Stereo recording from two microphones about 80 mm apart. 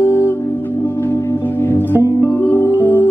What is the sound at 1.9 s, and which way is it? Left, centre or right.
Music, right.